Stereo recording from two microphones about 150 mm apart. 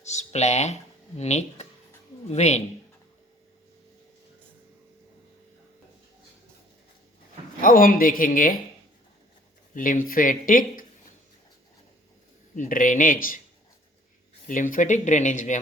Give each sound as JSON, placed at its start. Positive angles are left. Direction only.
{"t": 0.0, "sound": "a sound", "side_deg": 50}
{"t": 1.2, "sound": "speech", "side_deg": 50}
{"t": 7.6, "sound": "speech", "side_deg": 70}
{"t": 9.7, "sound": "speech", "side_deg": 65}
{"t": 12.5, "sound": "speech", "side_deg": 60}
{"t": 14.4, "sound": "speech", "side_deg": 60}